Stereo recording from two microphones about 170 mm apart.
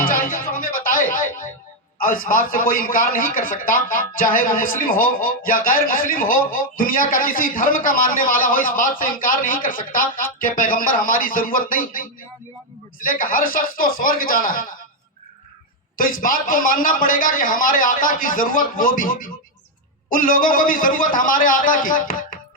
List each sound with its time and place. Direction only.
0.0 s music: 55° left (ahead or behind)
2.0 s a man's voice: 55° left (ahead or behind)
16.0 s a man's voice: 55° left (ahead or behind)